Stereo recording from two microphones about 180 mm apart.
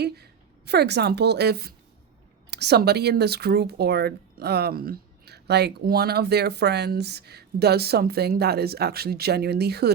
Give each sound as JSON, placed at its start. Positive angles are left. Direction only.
{"t": 0.0, "sound": "a woman's voice", "side_deg": -65}